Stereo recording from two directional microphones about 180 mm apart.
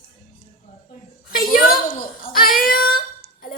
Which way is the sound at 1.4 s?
50° left (ahead or behind).